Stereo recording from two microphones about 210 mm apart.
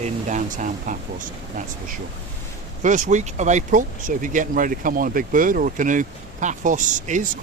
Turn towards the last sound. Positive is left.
turn(degrees=-35)  # may be behind; listen again after turning